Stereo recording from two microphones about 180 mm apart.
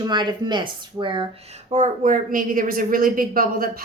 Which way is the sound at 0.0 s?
25° right (ahead or behind).